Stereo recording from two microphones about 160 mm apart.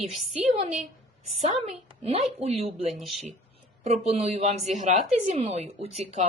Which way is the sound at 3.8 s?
45° right (ahead or behind).